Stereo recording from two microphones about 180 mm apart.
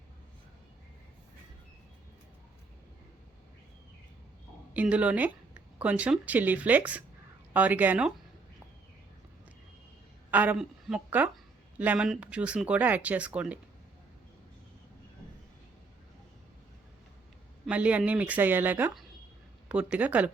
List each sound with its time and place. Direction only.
4.7 s speech: 10° right (ahead or behind)
10.3 s speech: 10° right (ahead or behind)
17.7 s speech: 5° right (ahead or behind)